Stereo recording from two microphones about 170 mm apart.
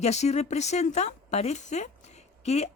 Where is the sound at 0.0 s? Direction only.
40° left (ahead or behind).